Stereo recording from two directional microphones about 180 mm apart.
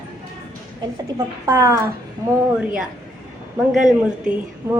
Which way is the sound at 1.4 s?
15° right (ahead or behind).